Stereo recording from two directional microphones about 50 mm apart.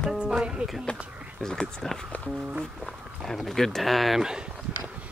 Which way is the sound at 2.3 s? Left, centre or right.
Right.